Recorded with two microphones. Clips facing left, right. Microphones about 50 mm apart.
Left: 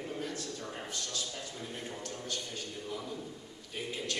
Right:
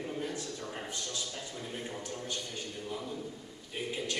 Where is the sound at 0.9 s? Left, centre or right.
Centre.